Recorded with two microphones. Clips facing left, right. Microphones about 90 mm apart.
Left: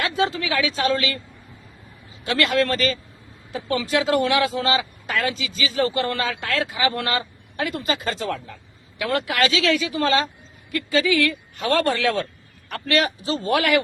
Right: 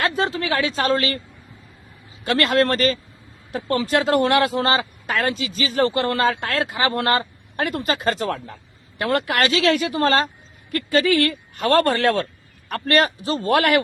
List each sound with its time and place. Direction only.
0.3 s a sound: 45° right (ahead or behind)
0.8 s a man's voice: 40° right (ahead or behind)
2.3 s a man's voice: 45° right (ahead or behind)